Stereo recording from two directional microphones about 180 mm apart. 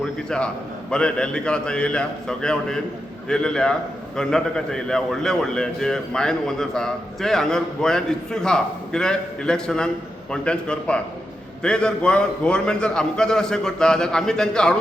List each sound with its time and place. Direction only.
0.0 s a man's voice: 5° left (ahead or behind)